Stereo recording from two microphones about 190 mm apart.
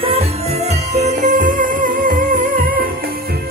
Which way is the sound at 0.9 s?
40° right (ahead or behind).